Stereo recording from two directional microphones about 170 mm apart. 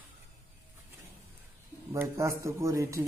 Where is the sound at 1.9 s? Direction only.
15° right (ahead or behind).